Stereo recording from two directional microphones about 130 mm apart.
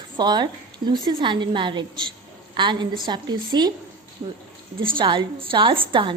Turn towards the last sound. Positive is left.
turn(degrees=-40)  # may be behind; listen again after turning